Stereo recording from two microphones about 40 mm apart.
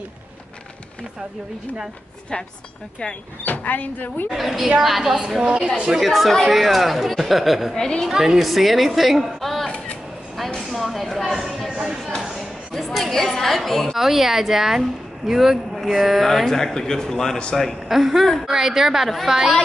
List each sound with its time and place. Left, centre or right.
3.4 s speech: left
4.3 s speech: centre
4.6 s a woman's voice: centre
5.9 s speech: centre
7.7 s speech: centre
8.1 s speech: centre
8.4 s a woman's voice: centre
10.7 s a sound: centre
11.7 s a sound: centre
12.4 s a sound: centre
13.9 s speech: centre
17.8 s speech: centre